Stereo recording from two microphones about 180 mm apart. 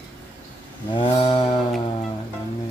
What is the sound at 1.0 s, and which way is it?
Mantra, 30° left (ahead or behind).